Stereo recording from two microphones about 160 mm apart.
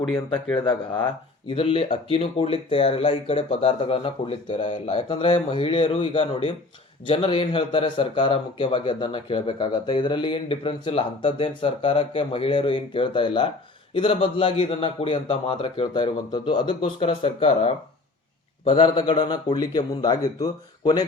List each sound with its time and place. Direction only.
0.7 s speech: 10° left (ahead or behind)
1.5 s speech: 35° left (ahead or behind)
4.9 s speech: 35° left (ahead or behind)
18.6 s speech: 30° left (ahead or behind)